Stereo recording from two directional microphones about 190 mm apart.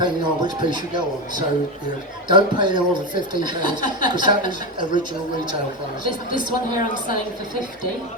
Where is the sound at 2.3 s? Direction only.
25° right (ahead or behind).